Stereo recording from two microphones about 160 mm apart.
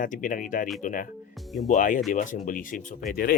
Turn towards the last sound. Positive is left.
turn(degrees=70)  # may be behind; listen again after turning